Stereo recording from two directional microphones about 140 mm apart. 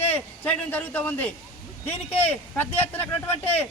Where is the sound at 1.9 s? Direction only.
50° left (ahead or behind).